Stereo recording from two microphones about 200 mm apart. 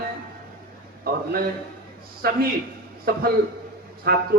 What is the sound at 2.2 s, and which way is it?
Speech, 50° right (ahead or behind).